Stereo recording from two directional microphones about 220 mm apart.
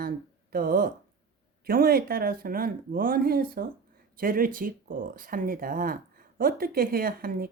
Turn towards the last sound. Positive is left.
turn(degrees=-40)  # may be behind; listen again after turning